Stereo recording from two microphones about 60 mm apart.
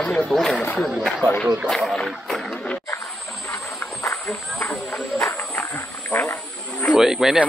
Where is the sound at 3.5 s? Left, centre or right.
Left.